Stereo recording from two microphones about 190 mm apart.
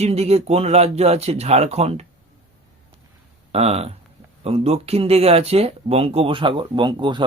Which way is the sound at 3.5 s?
35° right (ahead or behind).